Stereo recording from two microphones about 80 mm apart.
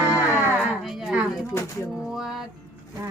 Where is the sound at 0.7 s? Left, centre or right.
Centre.